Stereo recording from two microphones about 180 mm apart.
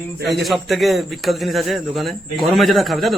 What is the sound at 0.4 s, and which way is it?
A man's voice, centre (ahead or behind).